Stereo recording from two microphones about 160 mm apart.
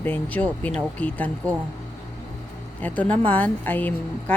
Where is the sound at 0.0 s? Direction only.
10° left (ahead or behind).